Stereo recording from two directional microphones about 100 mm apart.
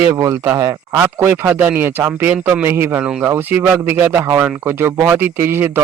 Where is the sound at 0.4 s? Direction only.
25° right (ahead or behind).